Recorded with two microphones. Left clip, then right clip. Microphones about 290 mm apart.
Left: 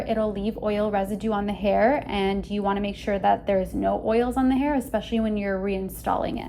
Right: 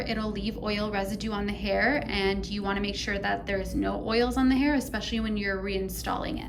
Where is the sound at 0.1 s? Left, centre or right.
Centre.